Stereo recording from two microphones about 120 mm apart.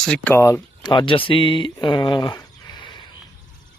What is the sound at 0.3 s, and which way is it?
Speech, 20° left (ahead or behind).